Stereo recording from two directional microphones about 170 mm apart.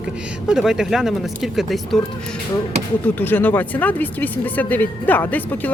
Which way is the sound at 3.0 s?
10° left (ahead or behind).